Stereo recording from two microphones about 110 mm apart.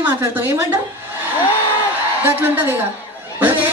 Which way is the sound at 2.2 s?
15° right (ahead or behind).